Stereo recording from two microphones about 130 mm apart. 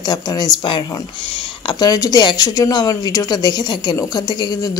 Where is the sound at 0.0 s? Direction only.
30° left (ahead or behind).